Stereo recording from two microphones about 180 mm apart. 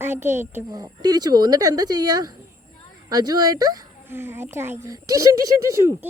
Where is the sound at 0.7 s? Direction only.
20° right (ahead or behind).